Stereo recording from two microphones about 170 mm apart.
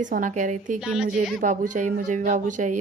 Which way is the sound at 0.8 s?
5° right (ahead or behind).